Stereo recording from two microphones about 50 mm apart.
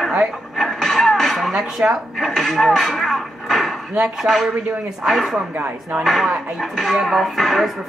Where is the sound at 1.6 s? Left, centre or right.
Centre.